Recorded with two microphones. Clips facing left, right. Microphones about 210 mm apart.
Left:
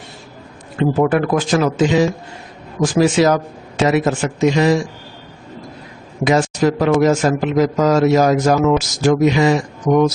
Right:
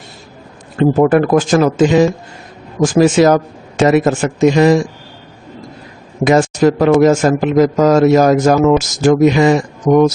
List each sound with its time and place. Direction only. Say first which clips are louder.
0.8 s a man's voice: right 5 dB; 45° right (ahead or behind)
6.2 s a man's voice: right 4 dB; 50° right (ahead or behind)